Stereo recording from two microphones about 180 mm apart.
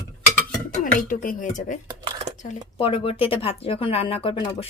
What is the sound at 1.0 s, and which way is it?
Speech, 50° left (ahead or behind).